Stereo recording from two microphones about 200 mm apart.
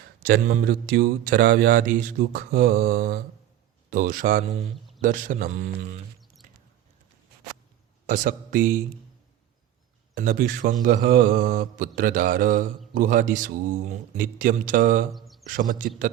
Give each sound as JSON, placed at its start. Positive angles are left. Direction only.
{"t": 0.2, "sound": "speech", "side_deg": -45}
{"t": 6.4, "sound": "mouse", "side_deg": -40}
{"t": 8.0, "sound": "speech", "side_deg": -45}
{"t": 10.2, "sound": "speech", "side_deg": -45}
{"t": 15.1, "sound": "a sound", "side_deg": 0}
{"t": 15.4, "sound": "speech", "side_deg": -45}